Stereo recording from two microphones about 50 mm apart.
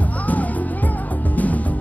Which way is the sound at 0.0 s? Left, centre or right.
Left.